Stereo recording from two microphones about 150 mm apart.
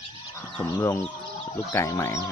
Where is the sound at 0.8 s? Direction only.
20° left (ahead or behind).